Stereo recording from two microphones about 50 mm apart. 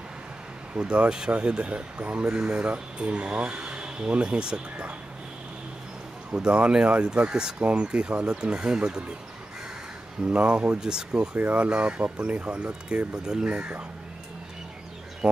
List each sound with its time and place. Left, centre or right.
0.7 s speech: centre
6.3 s speech: right
10.3 s speech: right
10.8 s speech: centre
11.1 s speech: right
13.1 s speech: centre